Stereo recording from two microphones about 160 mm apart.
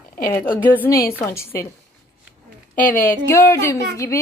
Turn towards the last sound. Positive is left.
turn(degrees=20)  # may be behind; listen again after turning